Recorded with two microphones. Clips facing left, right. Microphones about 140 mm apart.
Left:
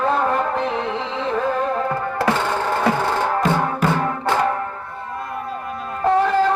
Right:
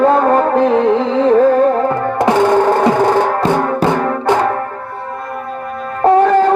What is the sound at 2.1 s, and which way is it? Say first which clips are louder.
Music: right 9 dB; 15° right (ahead or behind).